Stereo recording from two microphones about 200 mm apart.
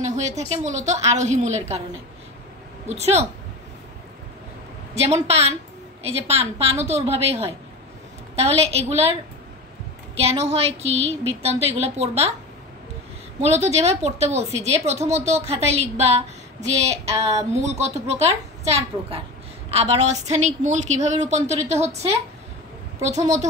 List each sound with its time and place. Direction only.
0.0 s a sound: 35° right (ahead or behind)
0.4 s a woman's voice: 35° right (ahead or behind)
2.9 s a woman's voice: 35° right (ahead or behind)
5.1 s a woman's voice: 30° right (ahead or behind)
10.1 s a woman's voice: 30° right (ahead or behind)
13.4 s a woman's voice: 35° right (ahead or behind)